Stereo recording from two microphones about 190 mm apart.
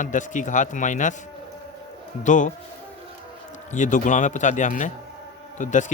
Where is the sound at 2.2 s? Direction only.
40° left (ahead or behind).